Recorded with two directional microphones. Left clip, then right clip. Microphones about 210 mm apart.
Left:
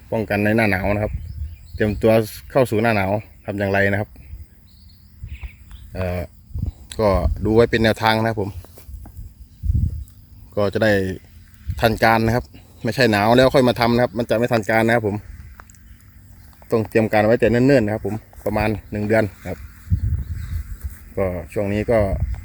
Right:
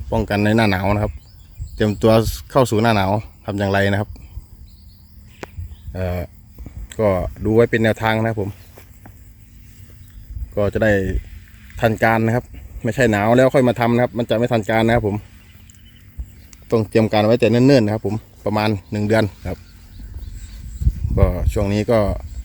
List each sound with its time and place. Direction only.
0.1 s speech: 10° right (ahead or behind)
5.9 s speech: centre (ahead or behind)
10.5 s speech: centre (ahead or behind)
16.6 s speech: 5° right (ahead or behind)
21.2 s speech: 10° right (ahead or behind)